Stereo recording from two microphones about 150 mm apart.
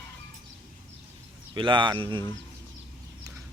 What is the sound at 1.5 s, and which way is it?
Speech, 30° right (ahead or behind).